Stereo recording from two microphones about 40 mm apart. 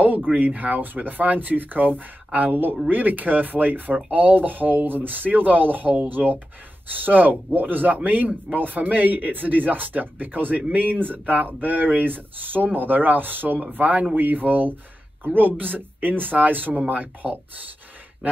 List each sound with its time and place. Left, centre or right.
0.5 s speech: right